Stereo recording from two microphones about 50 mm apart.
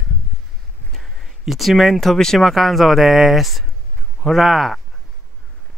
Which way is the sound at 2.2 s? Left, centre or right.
Centre.